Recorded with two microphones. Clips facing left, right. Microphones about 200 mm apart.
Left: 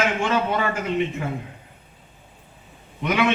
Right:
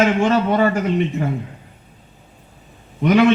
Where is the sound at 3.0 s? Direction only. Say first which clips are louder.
Right 9 dB; 40° right (ahead or behind).